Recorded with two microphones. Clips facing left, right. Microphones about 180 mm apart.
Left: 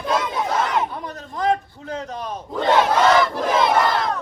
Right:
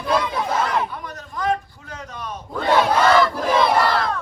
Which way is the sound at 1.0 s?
30° left (ahead or behind).